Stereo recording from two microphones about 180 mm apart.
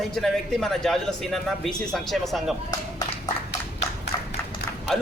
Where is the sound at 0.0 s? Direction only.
Centre (ahead or behind).